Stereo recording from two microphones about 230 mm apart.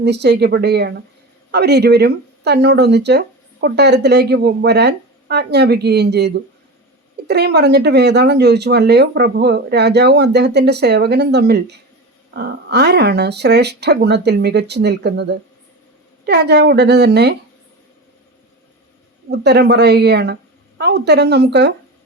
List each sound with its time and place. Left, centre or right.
0.0 s speech: right
19.3 s speech: right